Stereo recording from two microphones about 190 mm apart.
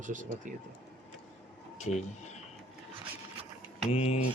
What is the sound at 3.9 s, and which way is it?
Speech, 35° left (ahead or behind).